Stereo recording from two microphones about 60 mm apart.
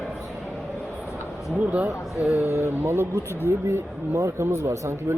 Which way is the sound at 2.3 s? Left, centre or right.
Right.